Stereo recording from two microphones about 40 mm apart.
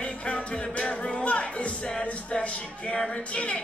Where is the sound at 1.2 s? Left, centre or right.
Left.